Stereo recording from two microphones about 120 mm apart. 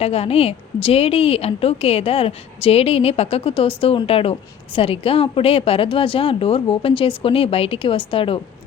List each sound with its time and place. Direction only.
0.0 s a woman's voice: 60° left (ahead or behind)